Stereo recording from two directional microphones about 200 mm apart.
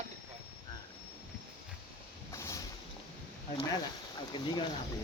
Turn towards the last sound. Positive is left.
turn(degrees=25)  # may be behind; listen again after turning